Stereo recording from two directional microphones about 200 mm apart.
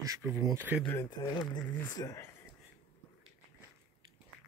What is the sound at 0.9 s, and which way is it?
Speech, 20° left (ahead or behind).